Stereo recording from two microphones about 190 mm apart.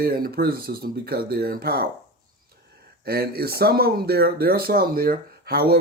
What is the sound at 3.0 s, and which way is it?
Speech, 55° right (ahead or behind).